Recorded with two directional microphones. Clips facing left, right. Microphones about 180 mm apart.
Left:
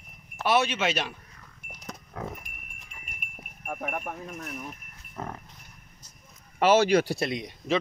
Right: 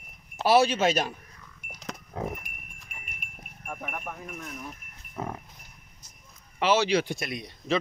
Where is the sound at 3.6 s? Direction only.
45° left (ahead or behind).